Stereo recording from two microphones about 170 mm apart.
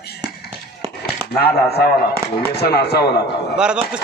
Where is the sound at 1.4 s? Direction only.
65° left (ahead or behind).